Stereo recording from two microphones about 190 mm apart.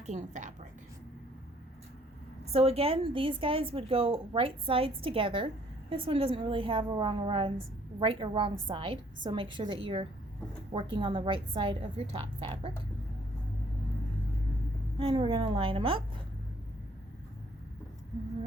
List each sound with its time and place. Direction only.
0.0 s a woman's voice: 40° right (ahead or behind)
2.5 s a woman's voice: 30° right (ahead or behind)
14.9 s a woman's voice: 25° right (ahead or behind)